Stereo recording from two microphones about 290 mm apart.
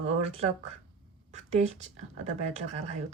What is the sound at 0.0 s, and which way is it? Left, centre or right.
Speech, right.